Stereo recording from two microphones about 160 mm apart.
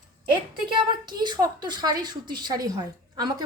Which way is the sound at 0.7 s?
30° right (ahead or behind).